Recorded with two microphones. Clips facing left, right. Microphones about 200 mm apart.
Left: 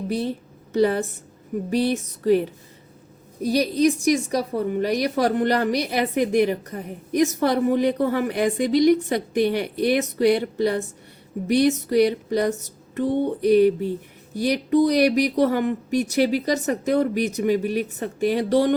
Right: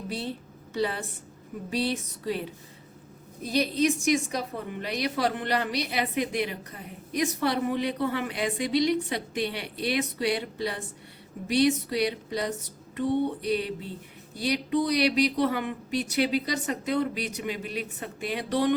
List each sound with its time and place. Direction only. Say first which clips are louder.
0.1 s a woman's voice: left 8 dB; 45° left (ahead or behind)
17.2 s a woman's voice: left 12 dB; 45° left (ahead or behind)